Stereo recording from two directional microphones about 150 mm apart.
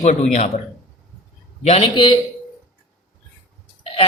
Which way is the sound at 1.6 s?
45° left (ahead or behind).